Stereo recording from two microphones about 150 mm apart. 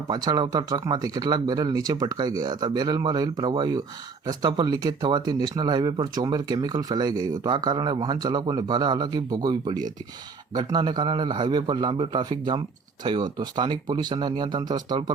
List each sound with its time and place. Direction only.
0.1 s a man's voice: 25° right (ahead or behind)